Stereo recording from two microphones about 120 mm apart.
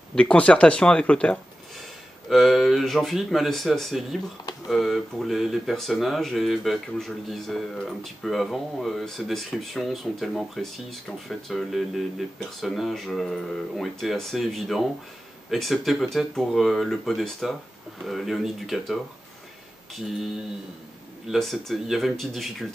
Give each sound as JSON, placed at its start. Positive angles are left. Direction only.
{"t": 0.1, "sound": "speech", "side_deg": 10}
{"t": 21.3, "sound": "speech", "side_deg": 0}